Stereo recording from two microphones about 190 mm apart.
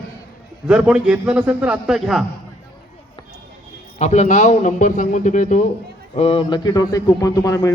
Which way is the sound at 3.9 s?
40° left (ahead or behind).